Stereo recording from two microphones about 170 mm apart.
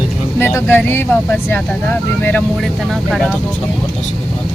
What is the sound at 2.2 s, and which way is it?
Speech, 10° left (ahead or behind).